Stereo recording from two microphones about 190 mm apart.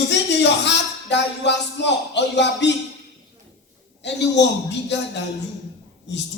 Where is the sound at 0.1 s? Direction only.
65° left (ahead or behind).